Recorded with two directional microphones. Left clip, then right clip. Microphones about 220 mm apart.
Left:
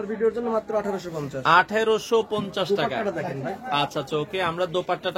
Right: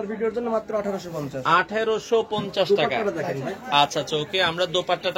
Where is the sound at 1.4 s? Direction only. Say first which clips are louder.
Left 2 dB; 40° left (ahead or behind).